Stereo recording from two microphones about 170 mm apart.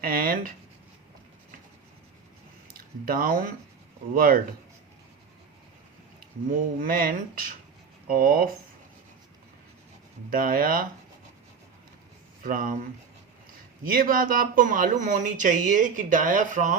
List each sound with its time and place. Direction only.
0.0 s speech: 60° right (ahead or behind)
2.7 s speech: 60° right (ahead or behind)
6.7 s speech: 55° right (ahead or behind)
10.2 s speech: 55° right (ahead or behind)
12.4 s speech: 55° right (ahead or behind)
13.8 s speech: 55° right (ahead or behind)